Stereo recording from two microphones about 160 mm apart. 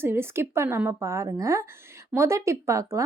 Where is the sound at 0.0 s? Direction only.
15° right (ahead or behind).